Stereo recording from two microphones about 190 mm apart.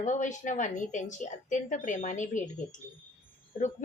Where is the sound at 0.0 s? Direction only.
40° left (ahead or behind).